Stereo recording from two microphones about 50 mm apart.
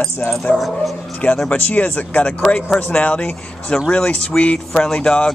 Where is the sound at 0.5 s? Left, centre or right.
Centre.